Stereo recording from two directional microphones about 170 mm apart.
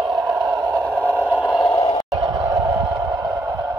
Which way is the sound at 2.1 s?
25° right (ahead or behind).